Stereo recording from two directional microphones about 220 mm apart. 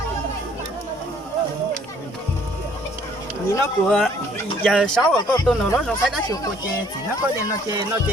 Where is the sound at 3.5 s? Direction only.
5° left (ahead or behind).